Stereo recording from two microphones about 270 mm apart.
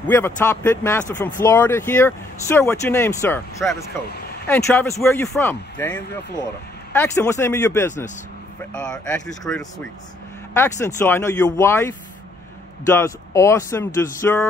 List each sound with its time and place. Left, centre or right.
0.0 s speech: centre